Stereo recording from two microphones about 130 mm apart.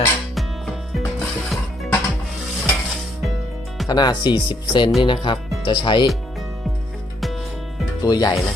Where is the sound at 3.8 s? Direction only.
30° left (ahead or behind).